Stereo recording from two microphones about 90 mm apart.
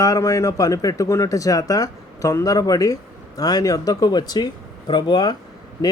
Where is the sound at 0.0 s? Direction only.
40° left (ahead or behind).